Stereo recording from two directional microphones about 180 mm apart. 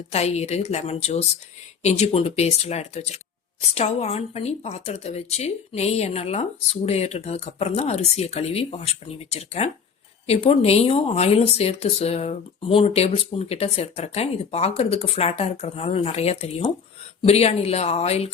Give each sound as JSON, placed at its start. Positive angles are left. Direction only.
{"t": 0.1, "sound": "speech", "side_deg": 35}